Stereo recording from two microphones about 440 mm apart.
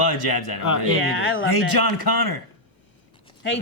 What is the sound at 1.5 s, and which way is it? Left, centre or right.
Speech, left.